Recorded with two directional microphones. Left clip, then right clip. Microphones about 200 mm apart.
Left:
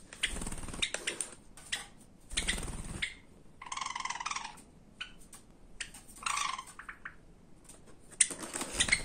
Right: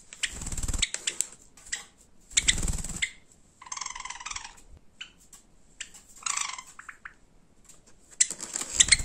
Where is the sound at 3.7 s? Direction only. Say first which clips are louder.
Even; 5° right (ahead or behind).